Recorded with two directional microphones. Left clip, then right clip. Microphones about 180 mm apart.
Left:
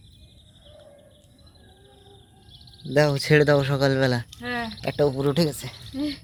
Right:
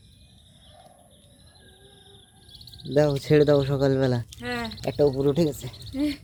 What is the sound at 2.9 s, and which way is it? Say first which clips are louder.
Speech: left 1 dB; centre (ahead or behind).